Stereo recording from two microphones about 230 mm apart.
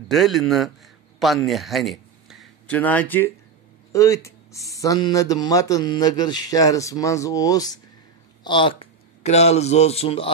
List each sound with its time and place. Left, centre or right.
0.1 s a man's voice: centre; by 10.3 s left